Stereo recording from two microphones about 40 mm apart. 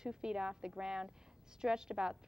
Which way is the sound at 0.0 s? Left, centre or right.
Centre.